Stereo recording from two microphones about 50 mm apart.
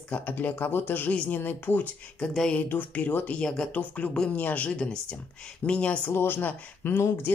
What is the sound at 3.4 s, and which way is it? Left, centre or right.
Speech, centre.